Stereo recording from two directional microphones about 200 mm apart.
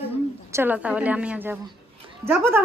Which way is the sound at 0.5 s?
10° right (ahead or behind).